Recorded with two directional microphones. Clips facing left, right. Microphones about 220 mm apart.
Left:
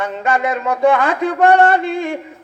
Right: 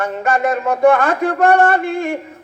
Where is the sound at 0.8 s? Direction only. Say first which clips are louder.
Right 2 dB; 45° right (ahead or behind).